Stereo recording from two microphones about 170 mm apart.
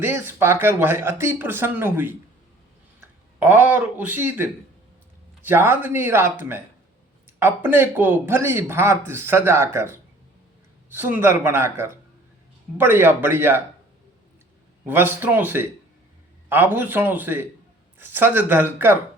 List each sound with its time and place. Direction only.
0.0 s speech: 15° right (ahead or behind)
3.4 s speech: 10° right (ahead or behind)
5.5 s speech: 15° right (ahead or behind)
14.8 s speech: 10° right (ahead or behind)